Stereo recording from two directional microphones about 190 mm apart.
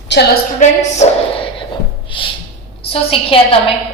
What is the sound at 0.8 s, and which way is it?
A woman's voice, 35° left (ahead or behind).